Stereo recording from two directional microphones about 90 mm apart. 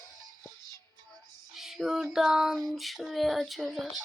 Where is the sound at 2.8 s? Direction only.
Centre (ahead or behind).